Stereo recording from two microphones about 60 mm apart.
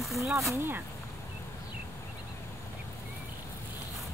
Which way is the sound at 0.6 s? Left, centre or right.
Right.